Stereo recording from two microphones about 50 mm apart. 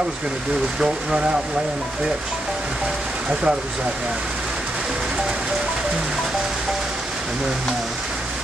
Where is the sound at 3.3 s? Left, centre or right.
Centre.